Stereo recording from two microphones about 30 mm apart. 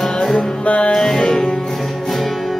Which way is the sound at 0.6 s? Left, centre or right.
Left.